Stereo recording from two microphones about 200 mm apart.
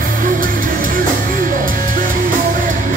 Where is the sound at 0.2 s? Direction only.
45° right (ahead or behind).